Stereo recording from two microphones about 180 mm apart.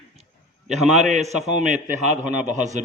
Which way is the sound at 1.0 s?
40° right (ahead or behind).